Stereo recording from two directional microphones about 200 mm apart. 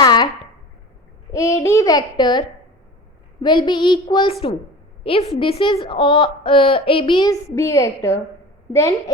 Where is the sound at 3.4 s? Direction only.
25° left (ahead or behind).